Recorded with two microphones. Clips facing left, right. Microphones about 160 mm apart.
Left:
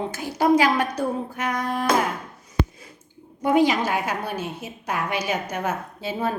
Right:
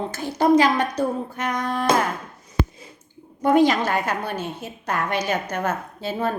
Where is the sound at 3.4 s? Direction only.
10° left (ahead or behind).